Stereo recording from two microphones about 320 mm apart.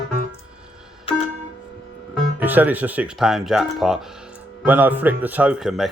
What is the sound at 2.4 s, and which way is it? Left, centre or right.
Speech, centre.